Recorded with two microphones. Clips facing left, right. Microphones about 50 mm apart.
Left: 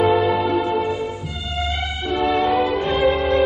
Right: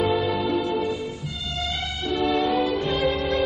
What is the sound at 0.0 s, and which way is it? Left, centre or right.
Music, left.